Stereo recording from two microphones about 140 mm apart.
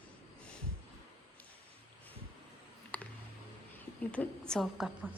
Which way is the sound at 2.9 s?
10° left (ahead or behind).